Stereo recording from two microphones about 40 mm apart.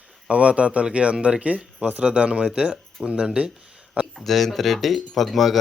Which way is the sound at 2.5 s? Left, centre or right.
Centre.